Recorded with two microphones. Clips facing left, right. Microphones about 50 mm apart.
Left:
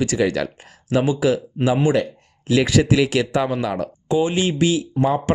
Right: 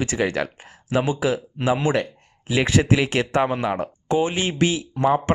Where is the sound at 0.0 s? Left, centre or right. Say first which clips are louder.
Left 3 dB; right.